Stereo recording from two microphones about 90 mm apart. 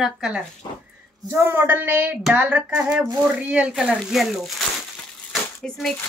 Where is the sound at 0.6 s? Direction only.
45° left (ahead or behind).